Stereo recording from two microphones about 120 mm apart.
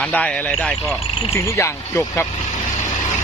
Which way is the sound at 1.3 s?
20° left (ahead or behind).